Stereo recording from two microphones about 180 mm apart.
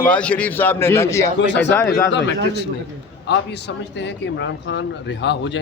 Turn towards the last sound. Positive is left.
turn(degrees=80)